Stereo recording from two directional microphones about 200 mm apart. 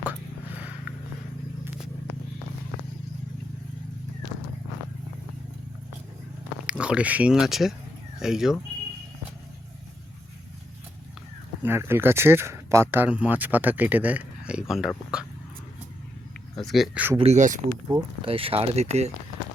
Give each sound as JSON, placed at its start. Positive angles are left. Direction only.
{"t": 1.6, "sound": "vehicle", "side_deg": -5}
{"t": 6.7, "sound": "speech", "side_deg": -5}
{"t": 11.6, "sound": "speech", "side_deg": -10}
{"t": 16.6, "sound": "speech", "side_deg": 0}
{"t": 17.2, "sound": "speech", "side_deg": -35}
{"t": 17.8, "sound": "speech", "side_deg": -25}